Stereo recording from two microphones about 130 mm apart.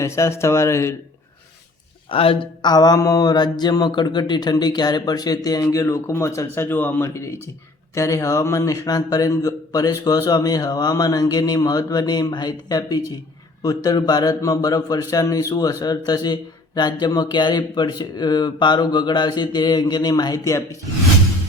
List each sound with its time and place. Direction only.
0.0 s speech: 20° left (ahead or behind)
2.0 s a man's voice: 45° left (ahead or behind); by 20.7 s 25° left (ahead or behind)